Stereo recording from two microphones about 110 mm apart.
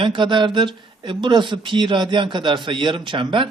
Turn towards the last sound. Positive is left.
turn(degrees=-50)  # may be behind; listen again after turning